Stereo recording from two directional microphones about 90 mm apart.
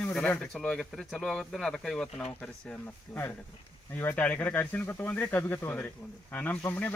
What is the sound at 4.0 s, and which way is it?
Speech, 20° left (ahead or behind).